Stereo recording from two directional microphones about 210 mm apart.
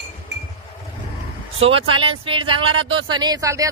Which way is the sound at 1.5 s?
25° right (ahead or behind).